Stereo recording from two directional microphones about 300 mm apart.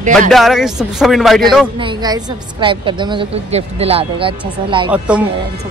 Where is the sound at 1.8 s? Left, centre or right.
Centre.